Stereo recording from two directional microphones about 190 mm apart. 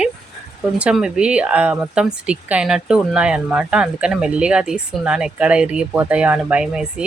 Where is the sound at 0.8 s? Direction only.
5° right (ahead or behind).